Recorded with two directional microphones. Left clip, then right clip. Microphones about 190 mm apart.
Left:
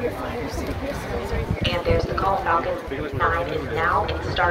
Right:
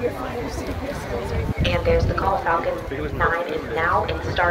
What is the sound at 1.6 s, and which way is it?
Speech, 60° left (ahead or behind).